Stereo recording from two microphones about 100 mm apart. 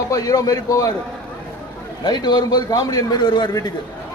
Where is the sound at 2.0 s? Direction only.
45° left (ahead or behind).